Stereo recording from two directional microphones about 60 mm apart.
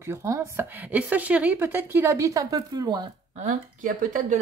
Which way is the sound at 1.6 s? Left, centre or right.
Right.